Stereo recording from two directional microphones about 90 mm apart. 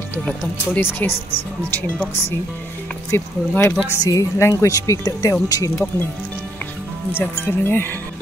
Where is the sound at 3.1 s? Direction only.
25° left (ahead or behind); by 5.7 s 45° left (ahead or behind).